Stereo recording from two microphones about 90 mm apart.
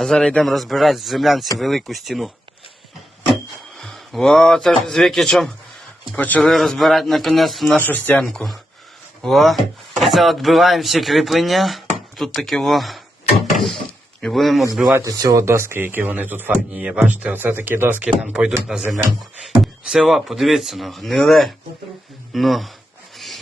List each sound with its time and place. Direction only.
0.0 s speech: 5° left (ahead or behind)
3.8 s speech: centre (ahead or behind)
6.1 s speech: 20° left (ahead or behind)
6.4 s speech: centre (ahead or behind)
7.8 s speech: 20° left (ahead or behind)
8.2 s speech: 5° left (ahead or behind)
15.0 s speech: 45° right (ahead or behind)
15.4 s speech: 30° right (ahead or behind)
18.3 s a man's voice: 15° right (ahead or behind)
23.1 s rub: centre (ahead or behind)